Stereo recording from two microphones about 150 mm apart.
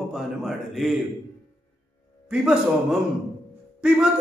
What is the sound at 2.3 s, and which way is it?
Speech, 5° right (ahead or behind).